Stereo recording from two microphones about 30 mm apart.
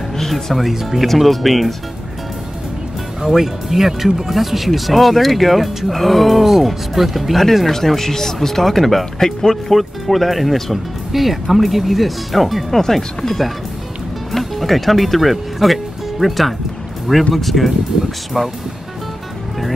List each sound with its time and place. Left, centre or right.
0.3 s speech: centre
3.2 s speech: centre
7.6 s speech: centre
9.7 s speech: centre